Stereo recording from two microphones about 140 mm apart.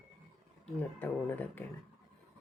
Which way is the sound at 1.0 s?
10° left (ahead or behind).